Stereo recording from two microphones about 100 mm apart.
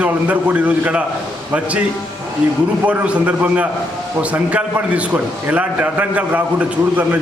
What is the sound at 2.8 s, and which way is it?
A man's voice, 15° right (ahead or behind).